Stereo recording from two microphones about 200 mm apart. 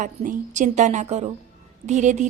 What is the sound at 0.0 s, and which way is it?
Speech, 40° right (ahead or behind).